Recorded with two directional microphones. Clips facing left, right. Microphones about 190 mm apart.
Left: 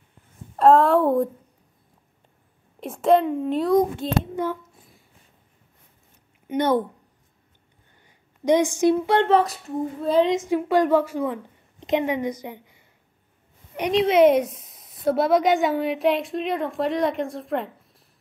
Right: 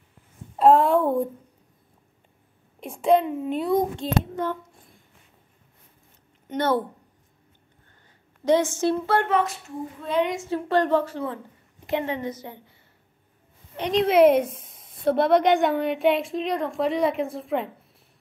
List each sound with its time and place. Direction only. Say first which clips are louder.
0.6 s a woman's voice: left 1 dB; centre (ahead or behind)
2.8 s a child's voice: left 2 dB; centre (ahead or behind)
4.4 s a sound: left 2 dB; 5° left (ahead or behind)
6.4 s a woman's voice: left 2 dB; 15° left (ahead or behind)
8.5 s a woman's voice: left 3 dB; 15° left (ahead or behind)
9.3 s a woman's voice: left 4 dB; 35° left (ahead or behind)
10.3 s a woman's voice: left 3 dB; 15° left (ahead or behind)
13.9 s a woman's voice: even; centre (ahead or behind)
14.5 s a sound: right 3 dB; centre (ahead or behind)
15.0 s a woman's voice: even; centre (ahead or behind)